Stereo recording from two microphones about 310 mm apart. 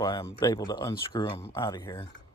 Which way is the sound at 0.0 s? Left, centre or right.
Centre.